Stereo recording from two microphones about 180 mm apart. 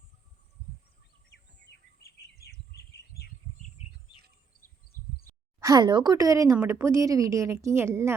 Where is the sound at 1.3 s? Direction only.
70° left (ahead or behind).